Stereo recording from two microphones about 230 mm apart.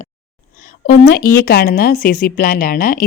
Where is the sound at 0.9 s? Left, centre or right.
Left.